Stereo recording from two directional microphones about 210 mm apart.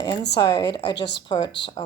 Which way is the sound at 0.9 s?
55° left (ahead or behind).